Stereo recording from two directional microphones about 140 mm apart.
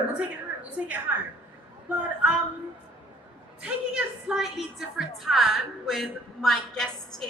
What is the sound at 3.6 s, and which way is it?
A woman's voice, 5° right (ahead or behind).